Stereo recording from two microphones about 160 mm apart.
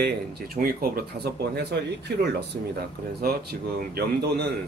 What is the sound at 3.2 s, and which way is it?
Speech, 75° right (ahead or behind).